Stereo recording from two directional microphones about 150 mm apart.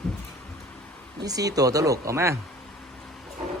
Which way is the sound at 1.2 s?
25° right (ahead or behind).